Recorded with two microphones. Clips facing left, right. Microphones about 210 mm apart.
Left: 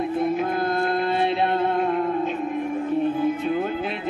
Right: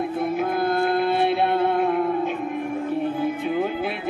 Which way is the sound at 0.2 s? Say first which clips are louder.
Right 1 dB; 5° right (ahead or behind).